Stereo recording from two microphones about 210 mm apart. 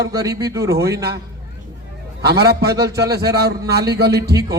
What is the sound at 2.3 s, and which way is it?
A man's voice, 50° right (ahead or behind).